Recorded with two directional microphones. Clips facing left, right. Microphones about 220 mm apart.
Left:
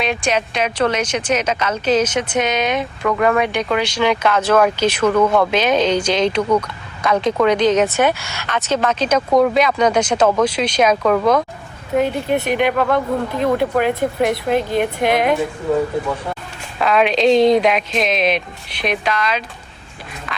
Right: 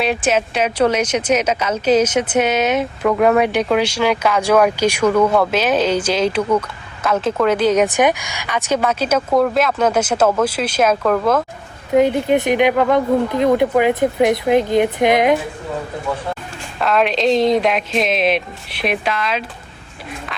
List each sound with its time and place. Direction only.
0.0 s speech: 5° right (ahead or behind)
11.9 s speech: 20° right (ahead or behind)
16.7 s speech: centre (ahead or behind)